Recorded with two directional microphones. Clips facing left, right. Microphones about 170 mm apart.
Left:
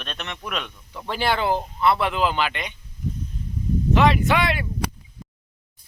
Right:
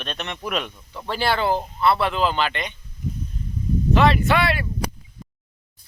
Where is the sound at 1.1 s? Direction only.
15° left (ahead or behind).